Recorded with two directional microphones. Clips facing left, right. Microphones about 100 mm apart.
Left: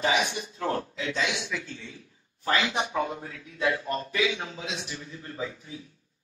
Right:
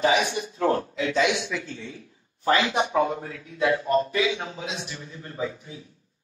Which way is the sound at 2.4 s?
30° right (ahead or behind).